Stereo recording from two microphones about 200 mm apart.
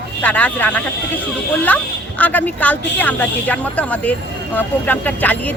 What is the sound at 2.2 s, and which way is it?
Speech, 10° left (ahead or behind).